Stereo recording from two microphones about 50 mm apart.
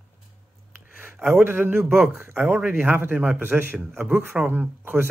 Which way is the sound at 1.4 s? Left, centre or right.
Right.